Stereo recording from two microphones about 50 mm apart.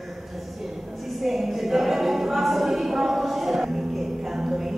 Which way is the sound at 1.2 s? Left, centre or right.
Centre.